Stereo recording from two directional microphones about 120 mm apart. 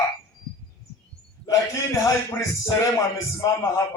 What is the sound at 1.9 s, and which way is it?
A man's voice, 25° left (ahead or behind).